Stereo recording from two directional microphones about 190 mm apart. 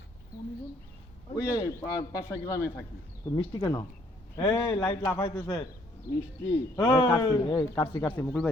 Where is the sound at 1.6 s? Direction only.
15° left (ahead or behind).